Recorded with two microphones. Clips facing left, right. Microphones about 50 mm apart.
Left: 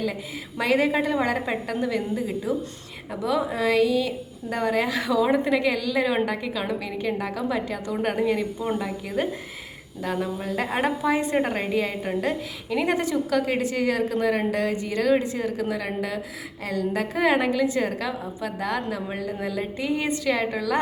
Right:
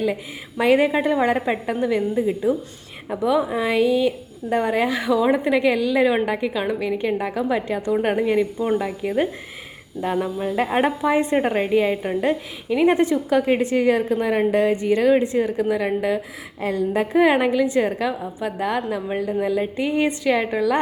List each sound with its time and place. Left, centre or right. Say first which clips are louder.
0.0 s a woman's voice: right 5 dB; right
20.3 s a woman's voice: right 5 dB; centre